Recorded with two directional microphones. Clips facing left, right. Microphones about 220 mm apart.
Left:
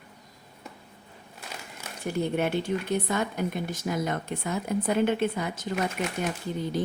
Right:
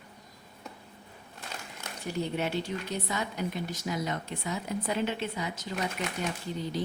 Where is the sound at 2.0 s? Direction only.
55° left (ahead or behind).